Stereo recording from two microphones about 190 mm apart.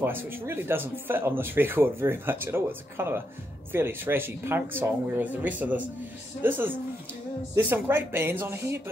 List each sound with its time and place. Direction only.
0.0 s speech: 10° right (ahead or behind)